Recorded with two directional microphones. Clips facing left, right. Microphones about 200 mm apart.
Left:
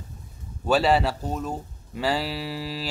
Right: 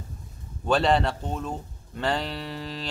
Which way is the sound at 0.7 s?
5° left (ahead or behind).